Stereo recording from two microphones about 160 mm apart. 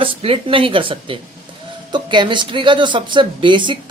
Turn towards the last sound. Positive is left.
turn(degrees=-30)  # may be behind; listen again after turning